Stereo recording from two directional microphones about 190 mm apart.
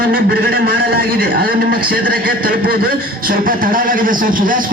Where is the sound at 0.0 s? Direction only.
50° right (ahead or behind).